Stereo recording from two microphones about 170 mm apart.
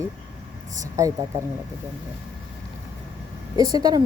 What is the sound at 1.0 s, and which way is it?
Speech, 20° right (ahead or behind).